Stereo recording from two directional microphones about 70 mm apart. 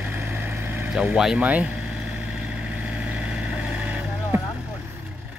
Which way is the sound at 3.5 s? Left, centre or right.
Centre.